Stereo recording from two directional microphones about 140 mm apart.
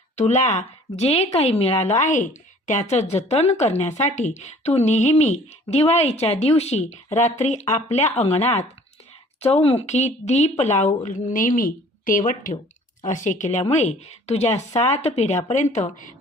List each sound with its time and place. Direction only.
0.2 s a woman's voice: 60° left (ahead or behind)
15.7 s speech: 60° left (ahead or behind)